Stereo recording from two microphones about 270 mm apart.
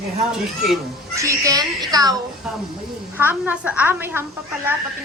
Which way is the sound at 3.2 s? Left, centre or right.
Centre.